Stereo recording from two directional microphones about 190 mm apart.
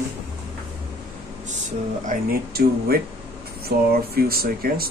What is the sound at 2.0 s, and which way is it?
Speech, 50° right (ahead or behind).